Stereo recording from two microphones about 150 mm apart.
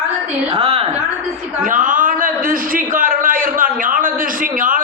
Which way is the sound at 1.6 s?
60° right (ahead or behind).